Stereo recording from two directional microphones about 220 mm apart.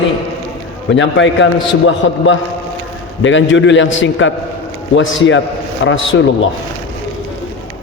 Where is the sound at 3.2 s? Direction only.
60° left (ahead or behind).